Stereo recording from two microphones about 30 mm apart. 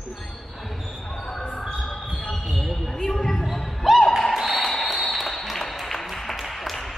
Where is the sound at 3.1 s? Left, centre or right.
Centre.